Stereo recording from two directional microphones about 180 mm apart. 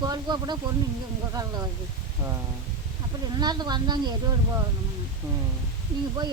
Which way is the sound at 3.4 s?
25° right (ahead or behind).